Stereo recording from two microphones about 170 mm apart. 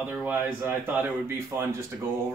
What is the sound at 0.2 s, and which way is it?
A man's voice, 10° right (ahead or behind).